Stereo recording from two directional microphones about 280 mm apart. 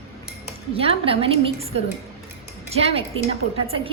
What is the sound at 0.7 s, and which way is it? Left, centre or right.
Speech, centre.